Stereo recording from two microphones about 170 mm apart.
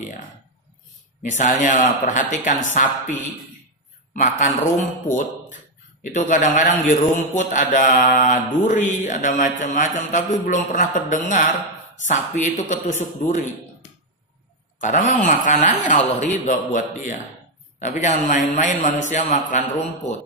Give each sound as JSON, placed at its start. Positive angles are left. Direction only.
{"t": 1.2, "sound": "a man's voice", "side_deg": 45}
{"t": 14.8, "sound": "a man's voice", "side_deg": 50}